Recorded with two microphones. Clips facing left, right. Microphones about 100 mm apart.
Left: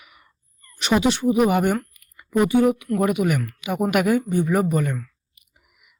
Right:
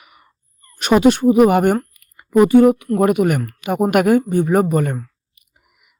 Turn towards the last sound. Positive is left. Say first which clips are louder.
# right 3 dB
turn(degrees=-35)  # may be behind; listen again after turning